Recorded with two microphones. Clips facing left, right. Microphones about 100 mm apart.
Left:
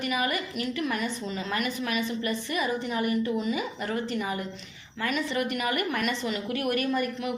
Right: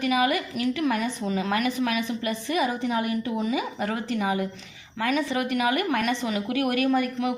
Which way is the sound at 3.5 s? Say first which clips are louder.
Right 3 dB; 90° right.